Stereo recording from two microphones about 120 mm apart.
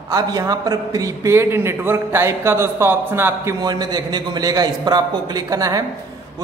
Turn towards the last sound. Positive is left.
turn(degrees=-30)  # may be behind; listen again after turning